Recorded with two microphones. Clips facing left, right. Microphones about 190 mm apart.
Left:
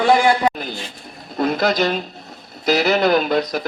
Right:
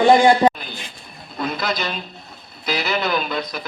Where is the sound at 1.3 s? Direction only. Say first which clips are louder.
Left 6 dB; 45° left (ahead or behind).